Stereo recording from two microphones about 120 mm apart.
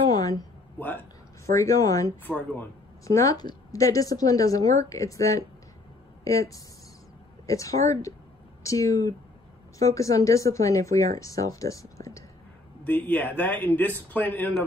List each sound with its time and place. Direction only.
0.1 s a sound: 30° left (ahead or behind)
1.4 s a woman's voice: 25° left (ahead or behind)
2.2 s a man's voice: 15° left (ahead or behind)
3.1 s a woman's voice: 30° left (ahead or behind)
12.8 s a man's voice: 15° left (ahead or behind)